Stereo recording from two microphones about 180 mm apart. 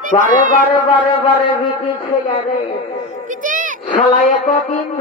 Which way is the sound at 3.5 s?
45° right (ahead or behind).